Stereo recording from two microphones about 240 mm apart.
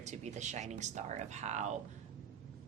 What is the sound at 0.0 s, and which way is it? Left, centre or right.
Speech, right.